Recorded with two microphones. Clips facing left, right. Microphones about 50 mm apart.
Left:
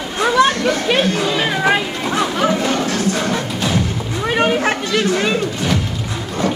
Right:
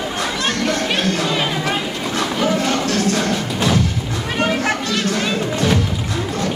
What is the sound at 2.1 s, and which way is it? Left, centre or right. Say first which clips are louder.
Music: left 2 dB; left.